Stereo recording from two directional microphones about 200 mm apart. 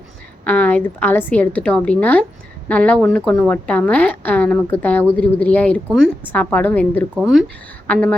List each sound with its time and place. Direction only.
0.4 s a woman's voice: 5° left (ahead or behind)